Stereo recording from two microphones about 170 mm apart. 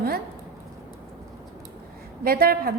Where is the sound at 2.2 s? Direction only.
60° right (ahead or behind).